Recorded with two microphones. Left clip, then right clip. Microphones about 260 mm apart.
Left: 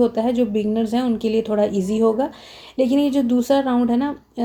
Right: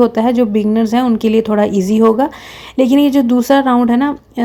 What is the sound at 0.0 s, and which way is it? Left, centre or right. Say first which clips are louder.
Speech: right 7 dB; right.